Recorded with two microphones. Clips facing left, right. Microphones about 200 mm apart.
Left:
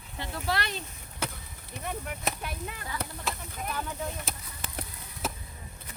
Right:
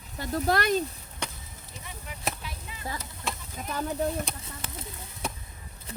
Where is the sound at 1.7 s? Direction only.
60° left (ahead or behind).